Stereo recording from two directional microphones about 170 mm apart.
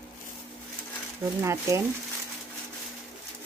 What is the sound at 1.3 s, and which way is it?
Speech, 15° right (ahead or behind).